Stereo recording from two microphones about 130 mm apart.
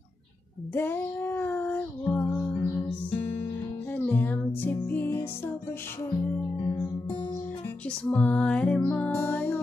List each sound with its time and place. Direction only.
0.7 s music: 15° left (ahead or behind)
3.2 s music: 45° left (ahead or behind)
3.9 s music: 15° left (ahead or behind)
8.0 s music: 10° left (ahead or behind)